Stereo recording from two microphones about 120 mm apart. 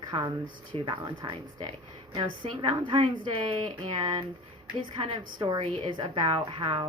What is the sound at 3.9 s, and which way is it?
A woman's voice, 35° right (ahead or behind).